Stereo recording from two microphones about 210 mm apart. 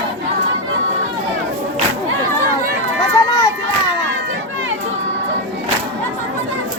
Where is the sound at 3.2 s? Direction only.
20° left (ahead or behind).